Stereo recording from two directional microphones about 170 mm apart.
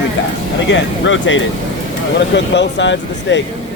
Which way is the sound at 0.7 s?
90° left.